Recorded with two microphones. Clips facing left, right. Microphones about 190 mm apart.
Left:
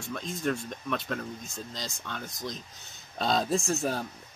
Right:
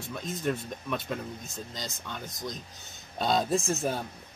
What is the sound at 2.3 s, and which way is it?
Speech, centre (ahead or behind).